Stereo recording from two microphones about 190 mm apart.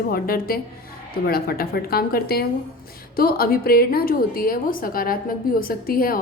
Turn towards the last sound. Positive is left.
turn(degrees=50)  # may be behind; listen again after turning